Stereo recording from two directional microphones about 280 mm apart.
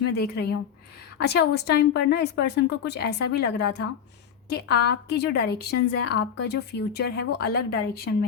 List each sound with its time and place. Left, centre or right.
0.1 s a woman's voice: left
5.7 s speech: left
6.4 s a woman's voice: left